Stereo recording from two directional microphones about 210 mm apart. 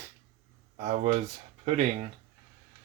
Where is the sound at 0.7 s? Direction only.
35° right (ahead or behind).